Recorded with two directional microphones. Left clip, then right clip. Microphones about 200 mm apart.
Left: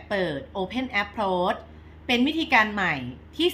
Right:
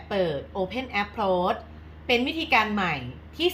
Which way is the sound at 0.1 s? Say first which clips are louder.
Right 1 dB; 20° left (ahead or behind).